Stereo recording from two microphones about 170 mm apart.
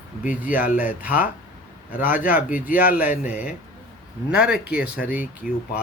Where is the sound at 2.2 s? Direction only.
50° left (ahead or behind).